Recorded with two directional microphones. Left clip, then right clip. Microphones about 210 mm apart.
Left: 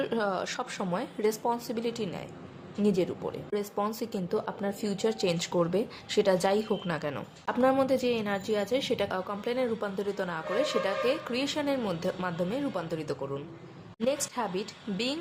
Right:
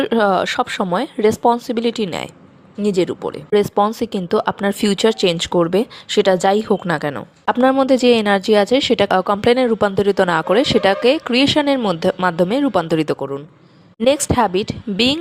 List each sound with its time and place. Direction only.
0.0 s speech: 40° right (ahead or behind)